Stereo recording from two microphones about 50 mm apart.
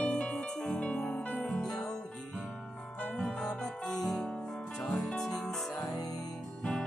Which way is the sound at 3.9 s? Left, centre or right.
Centre.